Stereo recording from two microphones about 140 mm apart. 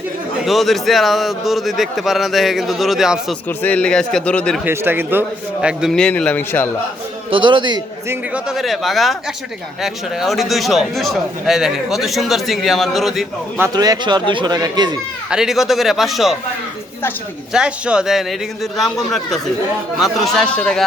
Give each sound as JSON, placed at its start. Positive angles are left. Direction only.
{"t": 0.4, "sound": "speech", "side_deg": 0}
{"t": 3.6, "sound": "speech", "side_deg": 10}
{"t": 4.6, "sound": "speech", "side_deg": -15}
{"t": 5.6, "sound": "speech", "side_deg": -5}
{"t": 6.0, "sound": "speech", "side_deg": 5}
{"t": 7.3, "sound": "speech", "side_deg": -35}
{"t": 8.4, "sound": "speech", "side_deg": 0}
{"t": 13.7, "sound": "speech", "side_deg": -30}
{"t": 15.3, "sound": "speech", "side_deg": -5}
{"t": 17.5, "sound": "speech", "side_deg": -5}
{"t": 20.3, "sound": "speech", "side_deg": 5}